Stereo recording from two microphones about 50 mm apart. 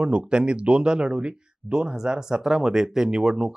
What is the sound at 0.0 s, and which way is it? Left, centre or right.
Speech, centre.